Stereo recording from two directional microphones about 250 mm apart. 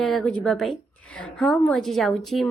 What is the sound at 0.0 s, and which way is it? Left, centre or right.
A woman's voice, centre.